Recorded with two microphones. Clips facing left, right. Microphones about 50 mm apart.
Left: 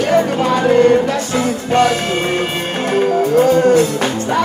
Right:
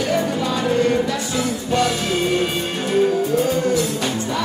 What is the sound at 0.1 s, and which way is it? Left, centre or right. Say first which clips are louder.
Music: left 7 dB; left.